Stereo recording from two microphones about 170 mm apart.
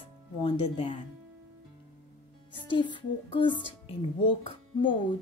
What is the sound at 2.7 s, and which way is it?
Speech, 30° left (ahead or behind).